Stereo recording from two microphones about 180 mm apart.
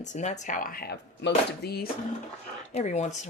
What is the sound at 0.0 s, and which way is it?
Speech, 40° left (ahead or behind).